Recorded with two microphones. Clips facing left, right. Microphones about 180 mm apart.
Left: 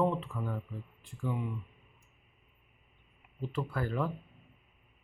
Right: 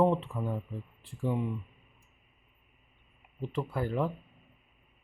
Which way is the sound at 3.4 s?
20° right (ahead or behind).